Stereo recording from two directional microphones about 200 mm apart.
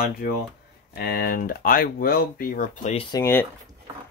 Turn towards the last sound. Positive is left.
turn(degrees=10)  # may be behind; listen again after turning